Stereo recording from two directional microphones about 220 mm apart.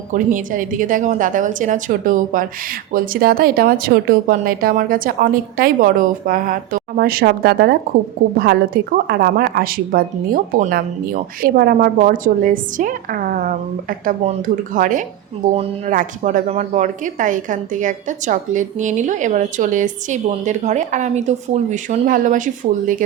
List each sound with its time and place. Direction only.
0.1 s speech: 35° right (ahead or behind)